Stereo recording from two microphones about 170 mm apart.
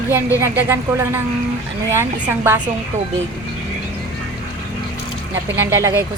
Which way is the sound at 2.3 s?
15° right (ahead or behind).